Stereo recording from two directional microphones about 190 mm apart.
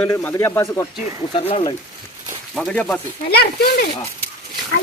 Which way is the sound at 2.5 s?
5° left (ahead or behind).